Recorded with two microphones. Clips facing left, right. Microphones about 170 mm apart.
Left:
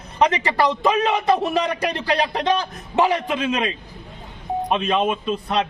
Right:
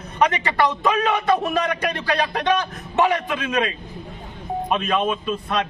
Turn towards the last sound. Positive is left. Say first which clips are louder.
# left 2 dB
turn(degrees=25)  # may be behind; listen again after turning